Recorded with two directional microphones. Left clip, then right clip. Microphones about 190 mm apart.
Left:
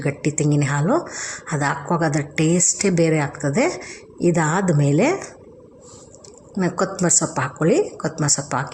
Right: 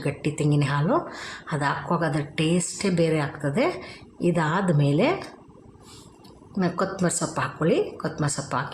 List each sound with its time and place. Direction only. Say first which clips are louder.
0.0 s speech: left 4 dB; 15° left (ahead or behind)
6.6 s speech: left 4 dB; 10° left (ahead or behind)